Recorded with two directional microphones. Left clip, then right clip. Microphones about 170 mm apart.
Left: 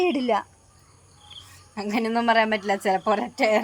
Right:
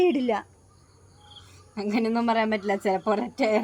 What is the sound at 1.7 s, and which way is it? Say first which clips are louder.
A woman's voice: left 1 dB; centre (ahead or behind).